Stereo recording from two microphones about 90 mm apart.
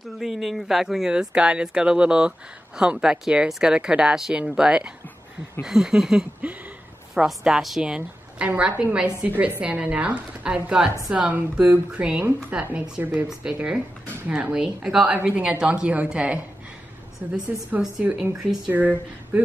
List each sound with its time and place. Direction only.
0.2 s speech: 5° right (ahead or behind)
13.0 s speech: 25° right (ahead or behind)
13.3 s speech: 10° right (ahead or behind)
18.1 s speech: 5° right (ahead or behind)
18.7 s speech: 20° right (ahead or behind)